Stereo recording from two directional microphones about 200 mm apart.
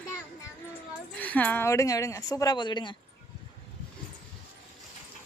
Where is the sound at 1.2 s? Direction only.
10° left (ahead or behind).